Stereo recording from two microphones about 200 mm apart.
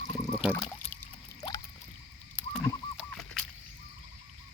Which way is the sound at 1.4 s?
25° left (ahead or behind).